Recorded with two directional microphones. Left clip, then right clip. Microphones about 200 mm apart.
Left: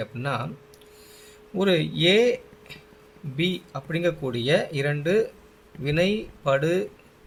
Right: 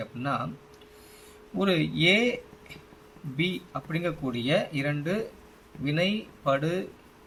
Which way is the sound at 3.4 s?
60° left (ahead or behind).